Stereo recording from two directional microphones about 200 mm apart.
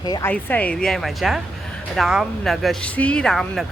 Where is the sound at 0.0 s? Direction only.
20° left (ahead or behind).